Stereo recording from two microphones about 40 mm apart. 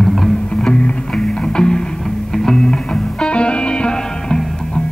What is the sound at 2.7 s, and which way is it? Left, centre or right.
Music, left.